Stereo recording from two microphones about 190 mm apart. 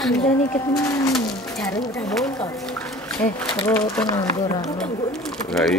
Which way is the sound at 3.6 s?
15° left (ahead or behind).